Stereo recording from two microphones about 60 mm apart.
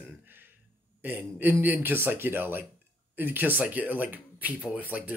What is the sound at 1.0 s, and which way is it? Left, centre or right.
Speech, right.